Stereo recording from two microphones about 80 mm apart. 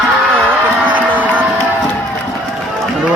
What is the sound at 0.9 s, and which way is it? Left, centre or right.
Music, right.